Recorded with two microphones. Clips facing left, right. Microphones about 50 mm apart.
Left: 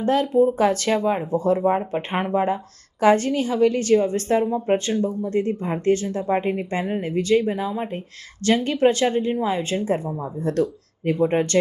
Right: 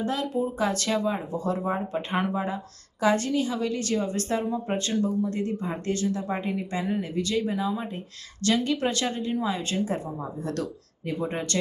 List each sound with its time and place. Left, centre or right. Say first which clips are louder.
0.0 s speech: left 9 dB; left